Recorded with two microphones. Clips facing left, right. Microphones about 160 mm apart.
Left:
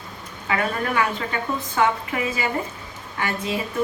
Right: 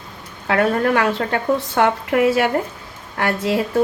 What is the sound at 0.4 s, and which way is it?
Speech, 75° right (ahead or behind).